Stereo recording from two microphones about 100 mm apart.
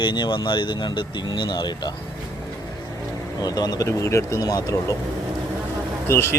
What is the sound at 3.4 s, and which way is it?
Speech, 40° left (ahead or behind).